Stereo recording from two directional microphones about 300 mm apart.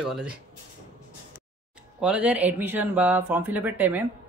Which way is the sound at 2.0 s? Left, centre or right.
Centre.